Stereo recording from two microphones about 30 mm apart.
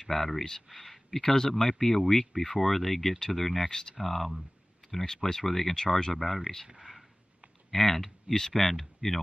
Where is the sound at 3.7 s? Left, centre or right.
Left.